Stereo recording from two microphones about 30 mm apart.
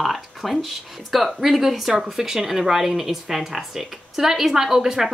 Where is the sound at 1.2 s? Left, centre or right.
Centre.